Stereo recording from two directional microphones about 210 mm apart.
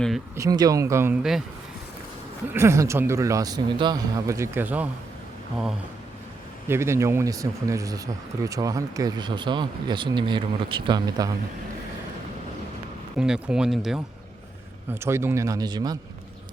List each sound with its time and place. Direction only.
0.3 s speech: 15° right (ahead or behind)
2.5 s speech: 10° right (ahead or behind)
6.7 s speech: 10° right (ahead or behind)
13.1 s speech: 5° right (ahead or behind); by 16.0 s 20° right (ahead or behind)